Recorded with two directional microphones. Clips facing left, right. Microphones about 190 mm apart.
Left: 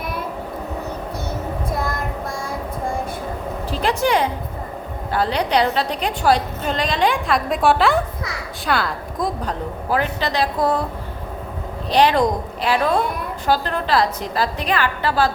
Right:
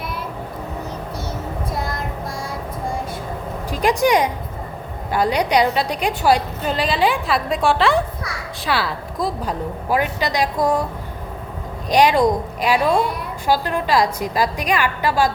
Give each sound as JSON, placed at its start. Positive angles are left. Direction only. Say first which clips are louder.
{"t": 3.7, "sound": "a woman's voice", "louder": "right 3 dB", "side_deg": -15}
{"t": 11.9, "sound": "a woman's voice", "louder": "right 1 dB", "side_deg": -10}